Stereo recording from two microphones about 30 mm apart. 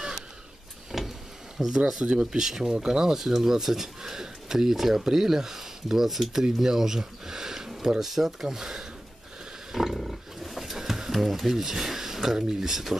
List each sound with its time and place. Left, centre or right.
0.9 s power windows: centre
1.6 s speech: centre
2.0 s speech: right
2.3 s speech: centre
6.0 s speech: centre
6.6 s speech: centre
9.7 s pig: centre
9.9 s roaring cats: centre